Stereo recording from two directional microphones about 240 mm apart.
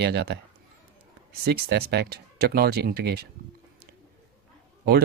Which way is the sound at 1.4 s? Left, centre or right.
Right.